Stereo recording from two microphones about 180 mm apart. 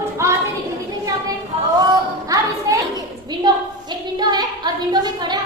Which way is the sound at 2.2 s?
20° right (ahead or behind).